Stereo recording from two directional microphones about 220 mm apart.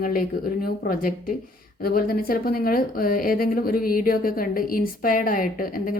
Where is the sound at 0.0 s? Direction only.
40° left (ahead or behind).